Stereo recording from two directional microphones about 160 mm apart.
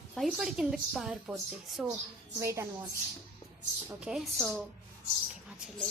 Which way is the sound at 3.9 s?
5° right (ahead or behind).